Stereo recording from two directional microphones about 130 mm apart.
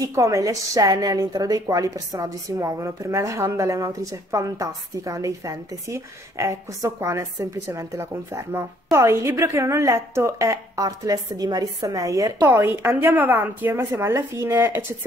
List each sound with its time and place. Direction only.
0.0 s a woman's voice: 25° right (ahead or behind)